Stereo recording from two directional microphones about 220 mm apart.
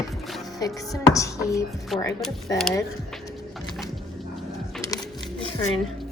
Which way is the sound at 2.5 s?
15° left (ahead or behind).